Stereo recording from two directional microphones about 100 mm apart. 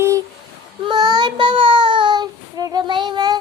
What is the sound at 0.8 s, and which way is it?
Child singing, 45° right (ahead or behind).